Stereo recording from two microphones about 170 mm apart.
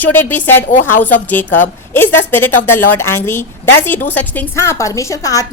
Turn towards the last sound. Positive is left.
turn(degrees=20)  # may be behind; listen again after turning